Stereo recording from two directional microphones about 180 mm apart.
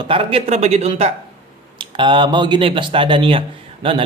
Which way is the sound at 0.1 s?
30° right (ahead or behind).